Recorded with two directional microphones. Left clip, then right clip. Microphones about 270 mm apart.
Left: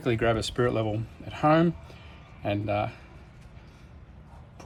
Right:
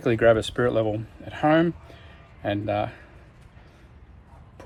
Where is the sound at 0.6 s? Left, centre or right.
Right.